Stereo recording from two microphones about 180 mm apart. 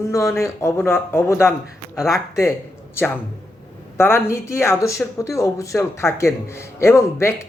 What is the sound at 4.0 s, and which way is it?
Speech, 15° left (ahead or behind).